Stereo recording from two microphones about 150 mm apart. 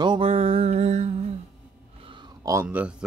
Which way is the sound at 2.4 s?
20° right (ahead or behind).